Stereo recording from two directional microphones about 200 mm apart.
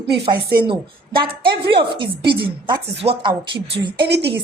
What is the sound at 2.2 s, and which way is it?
Speech, 55° right (ahead or behind).